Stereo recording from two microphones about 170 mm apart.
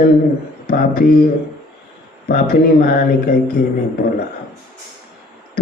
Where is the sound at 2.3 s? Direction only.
60° left (ahead or behind).